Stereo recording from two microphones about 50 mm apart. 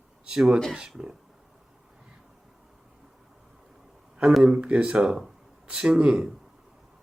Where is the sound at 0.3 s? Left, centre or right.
Centre.